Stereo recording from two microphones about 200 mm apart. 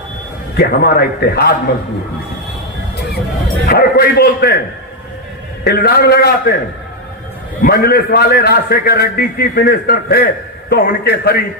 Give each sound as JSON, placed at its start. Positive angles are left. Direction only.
{"t": 0.5, "sound": "a man's voice", "side_deg": 50}
{"t": 3.7, "sound": "a man's voice", "side_deg": 50}
{"t": 5.6, "sound": "a man's voice", "side_deg": 50}
{"t": 7.6, "sound": "a man's voice", "side_deg": 50}